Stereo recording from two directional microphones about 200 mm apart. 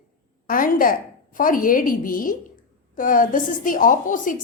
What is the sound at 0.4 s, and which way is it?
A woman's voice, 45° left (ahead or behind).